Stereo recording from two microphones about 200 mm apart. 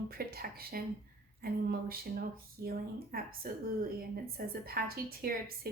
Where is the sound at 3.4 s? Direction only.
50° right (ahead or behind).